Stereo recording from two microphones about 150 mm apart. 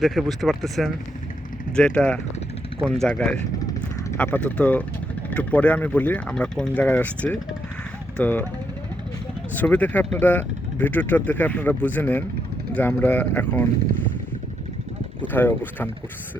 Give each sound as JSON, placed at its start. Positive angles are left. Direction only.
{"t": 0.0, "sound": "speech", "side_deg": 0}
{"t": 3.6, "sound": "a sound", "side_deg": 25}
{"t": 4.2, "sound": "speech", "side_deg": 10}
{"t": 9.6, "sound": "speech", "side_deg": 10}
{"t": 15.2, "sound": "speech", "side_deg": 10}